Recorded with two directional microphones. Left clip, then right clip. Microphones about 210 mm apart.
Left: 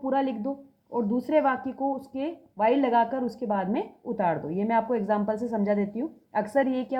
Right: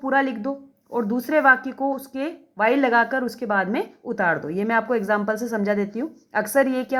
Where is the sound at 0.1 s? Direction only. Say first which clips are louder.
Right 6 dB; 35° right (ahead or behind).